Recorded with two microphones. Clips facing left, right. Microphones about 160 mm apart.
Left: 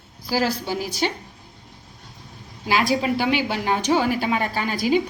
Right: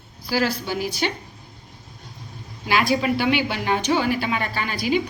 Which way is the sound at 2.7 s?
40° left (ahead or behind).